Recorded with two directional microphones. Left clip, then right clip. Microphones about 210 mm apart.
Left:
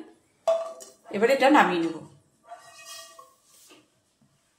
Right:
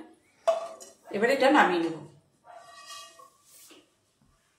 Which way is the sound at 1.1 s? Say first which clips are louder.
Left 3 dB; 55° left (ahead or behind).